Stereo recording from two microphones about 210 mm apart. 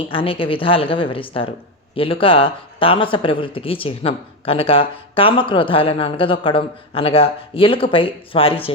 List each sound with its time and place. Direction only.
0.1 s speech: 25° left (ahead or behind)